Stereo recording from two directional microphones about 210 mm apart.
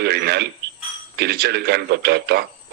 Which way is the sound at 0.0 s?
50° right (ahead or behind).